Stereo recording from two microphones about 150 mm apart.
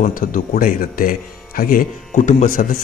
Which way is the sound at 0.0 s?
65° left (ahead or behind).